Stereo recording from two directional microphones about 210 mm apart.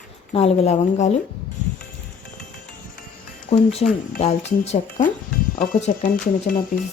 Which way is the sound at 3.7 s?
30° left (ahead or behind).